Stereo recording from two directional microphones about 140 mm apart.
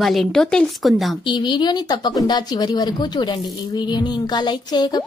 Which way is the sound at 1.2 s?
35° left (ahead or behind).